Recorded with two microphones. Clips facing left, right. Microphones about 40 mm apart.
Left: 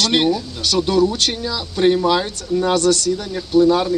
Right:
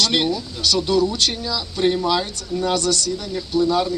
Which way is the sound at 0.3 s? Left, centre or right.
Left.